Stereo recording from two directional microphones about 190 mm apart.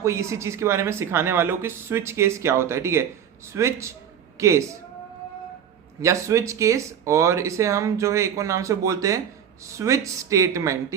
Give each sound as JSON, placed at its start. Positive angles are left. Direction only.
{"t": 0.0, "sound": "a man's voice", "side_deg": -15}
{"t": 6.0, "sound": "speech", "side_deg": -15}